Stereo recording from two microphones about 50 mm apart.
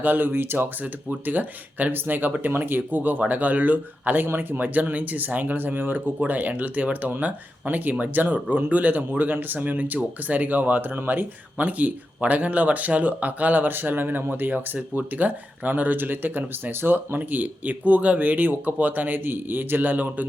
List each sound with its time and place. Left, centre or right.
0.0 s speech: right